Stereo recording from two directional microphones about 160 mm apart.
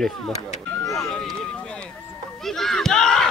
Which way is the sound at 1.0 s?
Centre (ahead or behind).